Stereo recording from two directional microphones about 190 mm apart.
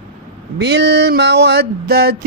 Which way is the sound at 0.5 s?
60° right (ahead or behind).